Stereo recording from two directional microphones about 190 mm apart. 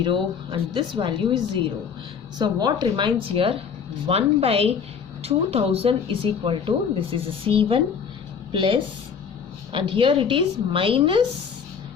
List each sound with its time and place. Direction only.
0.0 s a woman's voice: 25° right (ahead or behind)